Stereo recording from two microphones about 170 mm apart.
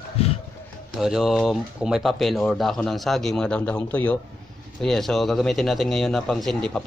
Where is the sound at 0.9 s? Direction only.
Centre (ahead or behind).